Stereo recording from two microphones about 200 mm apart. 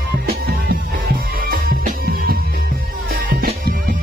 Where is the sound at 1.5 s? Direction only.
45° right (ahead or behind).